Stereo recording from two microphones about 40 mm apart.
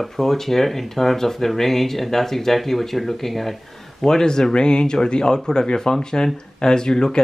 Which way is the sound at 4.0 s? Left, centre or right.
Centre.